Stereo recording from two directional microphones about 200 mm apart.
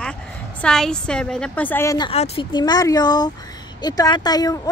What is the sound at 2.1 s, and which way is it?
Speech, 30° left (ahead or behind).